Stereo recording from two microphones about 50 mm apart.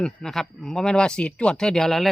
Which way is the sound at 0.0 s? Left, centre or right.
Centre.